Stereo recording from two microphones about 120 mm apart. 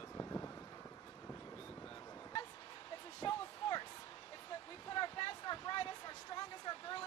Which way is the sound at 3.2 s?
40° left (ahead or behind).